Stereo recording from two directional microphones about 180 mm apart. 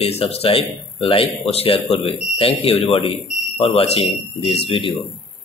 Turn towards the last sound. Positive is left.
turn(degrees=30)  # may be behind; listen again after turning